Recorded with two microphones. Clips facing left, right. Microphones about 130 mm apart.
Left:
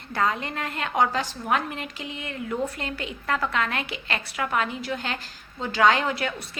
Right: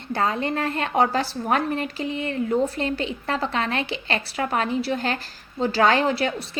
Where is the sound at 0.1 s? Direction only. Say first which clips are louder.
Right 3 dB; 30° right (ahead or behind).